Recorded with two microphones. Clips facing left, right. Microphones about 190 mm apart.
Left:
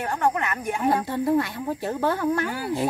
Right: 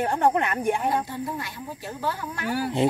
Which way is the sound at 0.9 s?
65° left (ahead or behind).